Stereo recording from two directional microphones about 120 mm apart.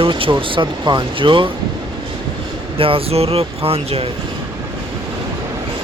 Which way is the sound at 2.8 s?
50° right (ahead or behind).